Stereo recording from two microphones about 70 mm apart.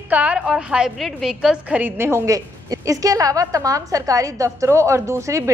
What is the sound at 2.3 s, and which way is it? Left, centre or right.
A woman's voice, right.